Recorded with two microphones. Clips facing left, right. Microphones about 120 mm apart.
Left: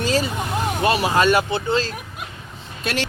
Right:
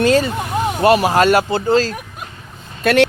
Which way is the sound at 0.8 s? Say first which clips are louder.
Right 6 dB; 45° right (ahead or behind).